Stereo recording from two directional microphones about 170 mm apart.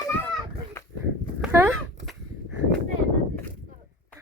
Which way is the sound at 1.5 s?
15° right (ahead or behind).